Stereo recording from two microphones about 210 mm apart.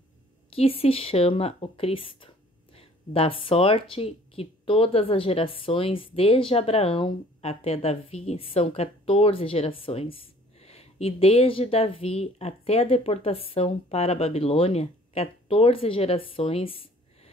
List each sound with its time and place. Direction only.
0.5 s speech: 25° left (ahead or behind)